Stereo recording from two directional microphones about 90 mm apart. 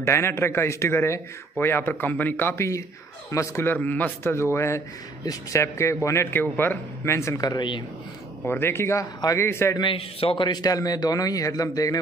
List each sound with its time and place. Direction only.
0.0 s a man's voice: 30° left (ahead or behind)
3.7 s a man's voice: 20° left (ahead or behind); by 7.8 s 60° left (ahead or behind)
8.5 s a man's voice: 25° left (ahead or behind)
9.8 s a man's voice: 80° left; by 10.6 s 60° left (ahead or behind)
10.6 s a man's voice: 45° left (ahead or behind)